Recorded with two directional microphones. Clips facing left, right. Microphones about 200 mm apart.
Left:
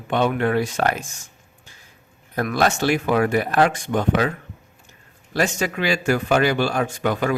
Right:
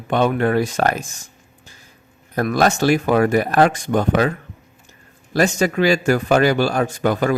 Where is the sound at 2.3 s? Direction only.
40° right (ahead or behind).